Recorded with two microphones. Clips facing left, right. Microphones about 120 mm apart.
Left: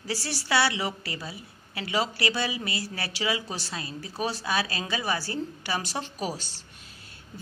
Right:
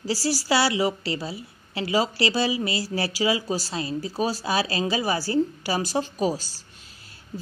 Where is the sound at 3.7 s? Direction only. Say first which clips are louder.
Right 7 dB; 30° right (ahead or behind).